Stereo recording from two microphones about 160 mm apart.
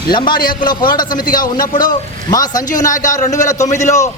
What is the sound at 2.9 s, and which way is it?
Speech, 55° left (ahead or behind).